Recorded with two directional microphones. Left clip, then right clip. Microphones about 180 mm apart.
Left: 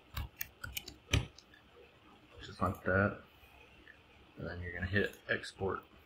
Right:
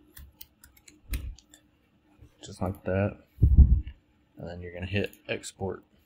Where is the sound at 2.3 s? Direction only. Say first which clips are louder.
Right 1 dB; 40° right (ahead or behind).